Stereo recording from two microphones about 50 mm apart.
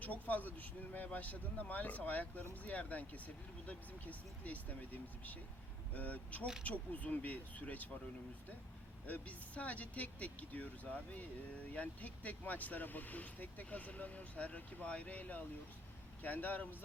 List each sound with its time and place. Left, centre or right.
0.0 s speech: left
9.0 s speech: left